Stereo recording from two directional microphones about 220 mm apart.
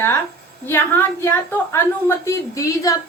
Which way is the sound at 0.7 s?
10° left (ahead or behind).